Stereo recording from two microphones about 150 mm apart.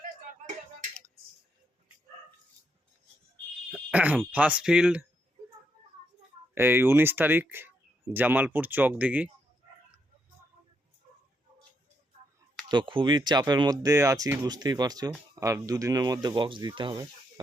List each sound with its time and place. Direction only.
3.9 s speech: 10° right (ahead or behind)
6.5 s speech: 15° right (ahead or behind)
12.6 s speech: 30° right (ahead or behind)